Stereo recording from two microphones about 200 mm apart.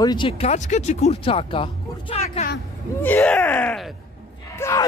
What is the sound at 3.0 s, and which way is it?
Speech, 10° left (ahead or behind).